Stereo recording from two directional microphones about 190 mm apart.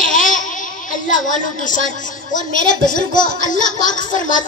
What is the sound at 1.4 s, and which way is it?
A woman's voice, 45° left (ahead or behind).